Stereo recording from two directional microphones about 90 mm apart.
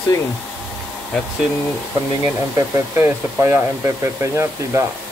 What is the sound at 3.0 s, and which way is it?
Speech, 25° right (ahead or behind).